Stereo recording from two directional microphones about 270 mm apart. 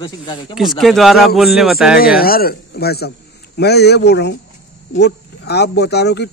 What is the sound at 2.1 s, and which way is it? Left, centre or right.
Speech, left.